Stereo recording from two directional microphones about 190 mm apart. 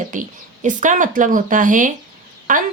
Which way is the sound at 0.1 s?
45° right (ahead or behind).